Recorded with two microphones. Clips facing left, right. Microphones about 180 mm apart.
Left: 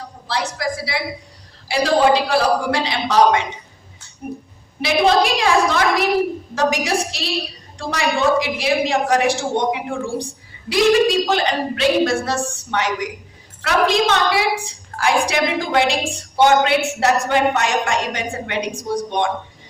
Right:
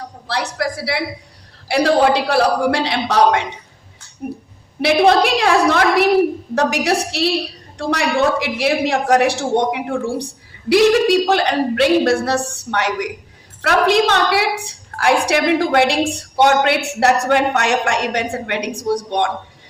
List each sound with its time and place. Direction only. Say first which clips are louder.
0.3 s a woman's voice: right 1 dB; 65° right (ahead or behind)